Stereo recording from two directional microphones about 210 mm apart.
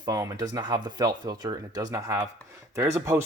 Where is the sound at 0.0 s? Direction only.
15° right (ahead or behind).